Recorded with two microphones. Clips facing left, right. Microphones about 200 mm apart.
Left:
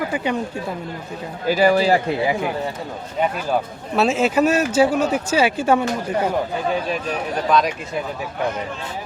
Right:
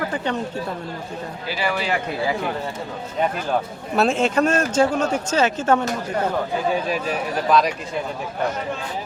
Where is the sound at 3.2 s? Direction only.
5° left (ahead or behind).